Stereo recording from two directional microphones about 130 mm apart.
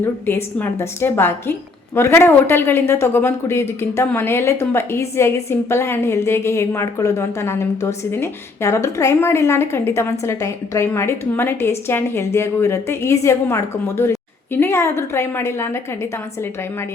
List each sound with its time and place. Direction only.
0.0 s a woman's voice: 15° left (ahead or behind)